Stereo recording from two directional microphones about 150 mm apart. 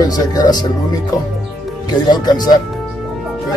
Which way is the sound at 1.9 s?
30° left (ahead or behind).